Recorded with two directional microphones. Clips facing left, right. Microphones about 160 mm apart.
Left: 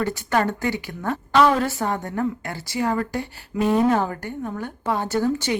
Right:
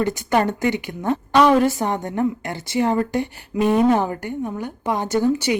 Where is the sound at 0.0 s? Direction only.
15° right (ahead or behind).